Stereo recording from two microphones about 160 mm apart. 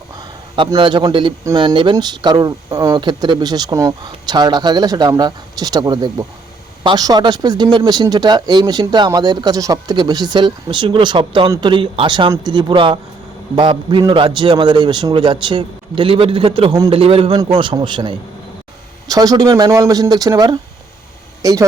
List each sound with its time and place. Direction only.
0.2 s a man's voice: 30° right (ahead or behind)